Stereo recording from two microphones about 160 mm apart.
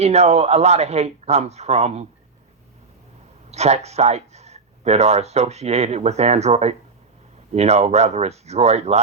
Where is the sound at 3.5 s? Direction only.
40° right (ahead or behind).